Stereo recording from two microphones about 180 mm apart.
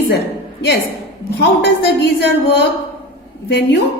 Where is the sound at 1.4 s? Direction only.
65° left (ahead or behind).